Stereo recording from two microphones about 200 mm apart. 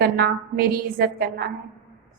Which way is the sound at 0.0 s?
50° right (ahead or behind).